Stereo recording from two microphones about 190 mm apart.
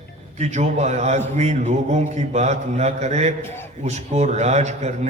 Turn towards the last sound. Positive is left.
turn(degrees=-35)  # may be behind; listen again after turning